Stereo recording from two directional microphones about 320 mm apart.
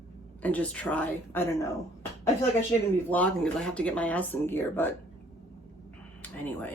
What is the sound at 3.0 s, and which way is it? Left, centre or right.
Speech, centre.